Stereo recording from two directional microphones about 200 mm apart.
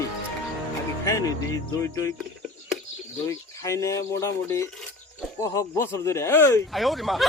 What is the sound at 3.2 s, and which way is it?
Speech, 15° left (ahead or behind).